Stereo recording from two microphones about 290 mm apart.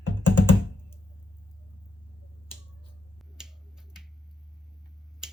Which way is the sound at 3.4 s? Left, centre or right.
Centre.